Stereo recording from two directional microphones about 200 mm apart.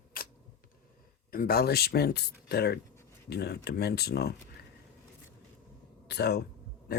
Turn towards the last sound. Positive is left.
turn(degrees=55)  # may be behind; listen again after turning